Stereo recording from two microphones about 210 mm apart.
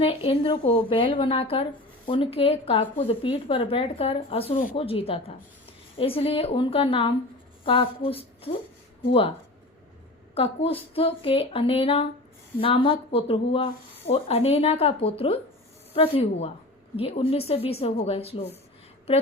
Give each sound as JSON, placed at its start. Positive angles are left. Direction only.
{"t": 0.0, "sound": "speech", "side_deg": 25}
{"t": 10.3, "sound": "speech", "side_deg": 30}